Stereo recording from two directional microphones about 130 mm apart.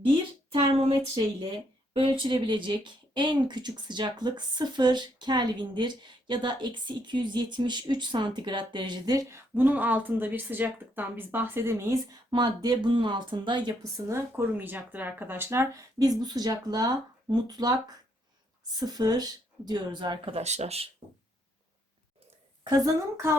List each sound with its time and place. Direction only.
0.5 s speech: 45° right (ahead or behind)
9.6 s speech: 15° right (ahead or behind)
12.3 s speech: 35° right (ahead or behind)
13.9 s speech: 20° right (ahead or behind); by 20.8 s 55° right (ahead or behind)
22.6 s speech: 30° right (ahead or behind)